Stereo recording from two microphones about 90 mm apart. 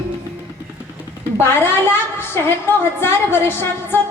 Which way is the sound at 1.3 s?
25° left (ahead or behind).